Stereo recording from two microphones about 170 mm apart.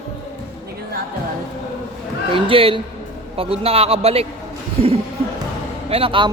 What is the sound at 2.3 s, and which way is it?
A man's voice, 30° right (ahead or behind).